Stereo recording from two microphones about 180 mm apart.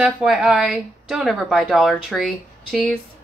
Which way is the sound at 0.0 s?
5° right (ahead or behind).